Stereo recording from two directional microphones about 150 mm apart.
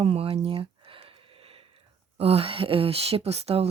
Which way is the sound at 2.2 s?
40° right (ahead or behind).